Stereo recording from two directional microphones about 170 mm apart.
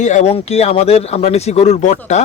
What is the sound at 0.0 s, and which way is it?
Speech, 45° left (ahead or behind).